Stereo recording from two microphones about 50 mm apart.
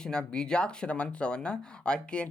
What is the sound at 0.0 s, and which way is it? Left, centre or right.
Speech, centre.